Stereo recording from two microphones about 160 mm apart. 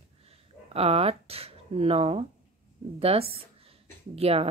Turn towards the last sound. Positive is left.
turn(degrees=-40)  # may be behind; listen again after turning